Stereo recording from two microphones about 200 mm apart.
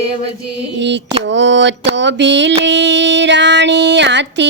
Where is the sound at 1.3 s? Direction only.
65° right (ahead or behind).